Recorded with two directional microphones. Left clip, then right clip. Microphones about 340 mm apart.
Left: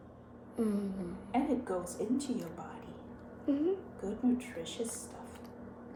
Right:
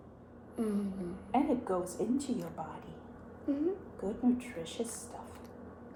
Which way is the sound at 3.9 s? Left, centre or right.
Centre.